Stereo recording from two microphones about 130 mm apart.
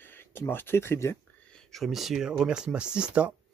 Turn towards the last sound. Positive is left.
turn(degrees=-10)  # may be behind; listen again after turning